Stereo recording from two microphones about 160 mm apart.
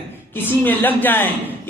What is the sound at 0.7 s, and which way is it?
Speech, 10° left (ahead or behind).